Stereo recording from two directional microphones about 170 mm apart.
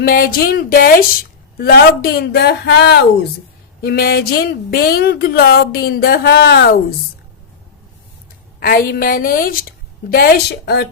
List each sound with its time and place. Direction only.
0.0 s a woman's voice: 60° left (ahead or behind)
8.6 s a woman's voice: 60° left (ahead or behind); by 10.8 s 75° left (ahead or behind)